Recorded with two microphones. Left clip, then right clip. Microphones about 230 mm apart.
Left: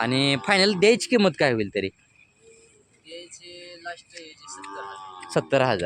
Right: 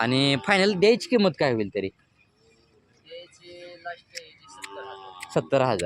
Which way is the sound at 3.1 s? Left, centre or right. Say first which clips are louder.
Left 2 dB; left.